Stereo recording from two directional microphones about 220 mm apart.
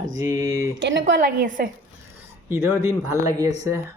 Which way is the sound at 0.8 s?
55° right (ahead or behind).